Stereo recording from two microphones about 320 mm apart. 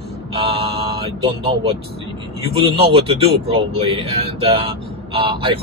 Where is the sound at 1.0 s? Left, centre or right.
Centre.